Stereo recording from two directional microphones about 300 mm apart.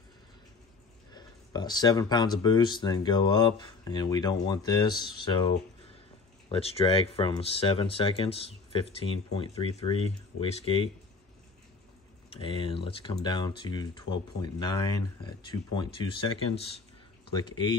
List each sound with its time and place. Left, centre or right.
1.1 s speech: centre
12.3 s speech: centre